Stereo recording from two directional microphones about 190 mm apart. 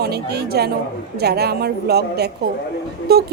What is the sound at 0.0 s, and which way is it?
A woman's voice, 60° right (ahead or behind).